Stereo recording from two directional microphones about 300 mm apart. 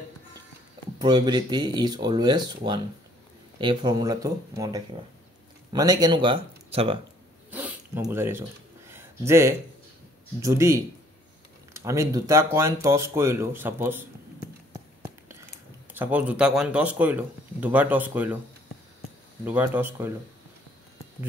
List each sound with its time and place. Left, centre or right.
0.9 s speech: centre
7.5 s a sound: centre
10.4 s speech: centre
15.9 s speech: centre
19.4 s speech: centre